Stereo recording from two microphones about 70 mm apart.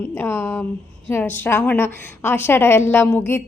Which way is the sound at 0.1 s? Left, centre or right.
Left.